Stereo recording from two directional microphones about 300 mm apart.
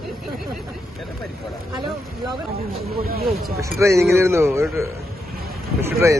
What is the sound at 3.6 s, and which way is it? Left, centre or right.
A man's voice, centre.